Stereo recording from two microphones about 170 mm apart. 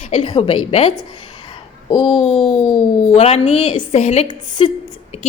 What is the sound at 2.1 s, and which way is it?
A woman's voice, 35° left (ahead or behind).